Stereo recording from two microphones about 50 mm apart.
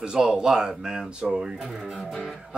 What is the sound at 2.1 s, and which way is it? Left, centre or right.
Music, centre.